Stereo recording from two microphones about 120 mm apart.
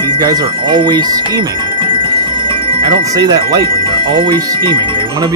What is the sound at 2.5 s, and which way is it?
Music, 45° right (ahead or behind).